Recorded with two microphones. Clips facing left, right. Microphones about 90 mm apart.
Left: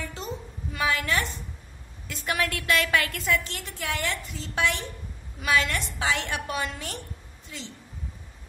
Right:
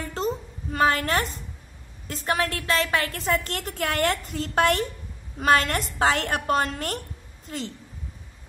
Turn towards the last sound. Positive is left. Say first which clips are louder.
# right 7 dB
turn(degrees=-50)  # may be behind; listen again after turning